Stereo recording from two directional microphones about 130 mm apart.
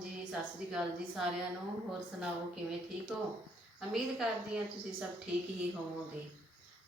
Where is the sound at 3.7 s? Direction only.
5° right (ahead or behind).